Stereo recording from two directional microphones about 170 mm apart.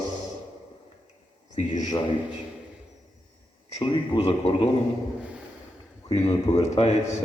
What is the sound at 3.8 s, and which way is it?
Speech, 30° left (ahead or behind).